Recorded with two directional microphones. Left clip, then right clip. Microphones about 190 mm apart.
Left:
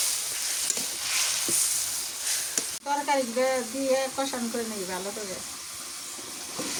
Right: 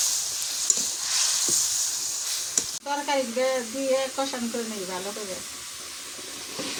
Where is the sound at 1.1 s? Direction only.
20° left (ahead or behind).